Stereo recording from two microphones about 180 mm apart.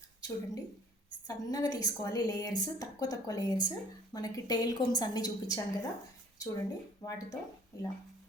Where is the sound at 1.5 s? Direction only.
20° left (ahead or behind).